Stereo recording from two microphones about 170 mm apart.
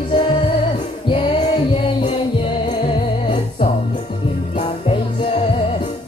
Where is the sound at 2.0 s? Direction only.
30° left (ahead or behind).